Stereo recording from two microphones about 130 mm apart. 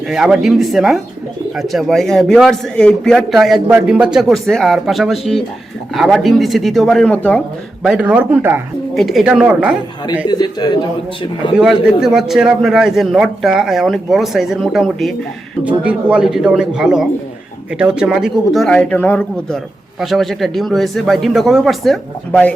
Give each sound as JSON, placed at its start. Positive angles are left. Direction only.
{"t": 0.1, "sound": "a man's voice", "side_deg": -5}
{"t": 7.9, "sound": "speech", "side_deg": -10}
{"t": 9.0, "sound": "a man's voice", "side_deg": 0}
{"t": 10.2, "sound": "speech", "side_deg": 35}
{"t": 11.5, "sound": "a man's voice", "side_deg": -5}
{"t": 20.0, "sound": "a man's voice", "side_deg": 0}
{"t": 22.3, "sound": "speech", "side_deg": 10}